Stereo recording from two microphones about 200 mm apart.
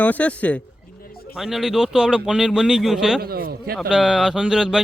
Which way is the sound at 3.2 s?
50° right (ahead or behind).